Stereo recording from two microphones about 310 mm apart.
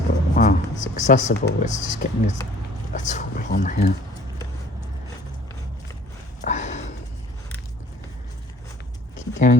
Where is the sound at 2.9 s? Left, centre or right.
Left.